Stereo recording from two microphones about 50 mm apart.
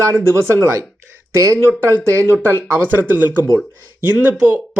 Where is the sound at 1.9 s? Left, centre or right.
Right.